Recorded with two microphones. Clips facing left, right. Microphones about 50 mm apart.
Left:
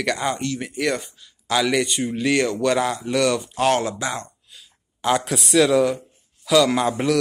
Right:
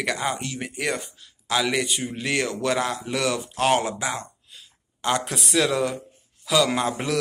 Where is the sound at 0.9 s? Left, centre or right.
Centre.